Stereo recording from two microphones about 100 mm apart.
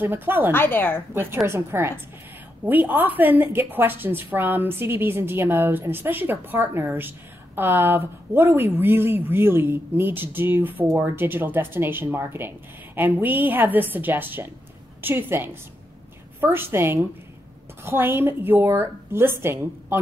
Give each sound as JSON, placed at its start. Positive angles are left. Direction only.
{"t": 0.0, "sound": "a woman's voice", "side_deg": -20}
{"t": 0.5, "sound": "speech", "side_deg": 20}
{"t": 1.1, "sound": "a woman's voice", "side_deg": -25}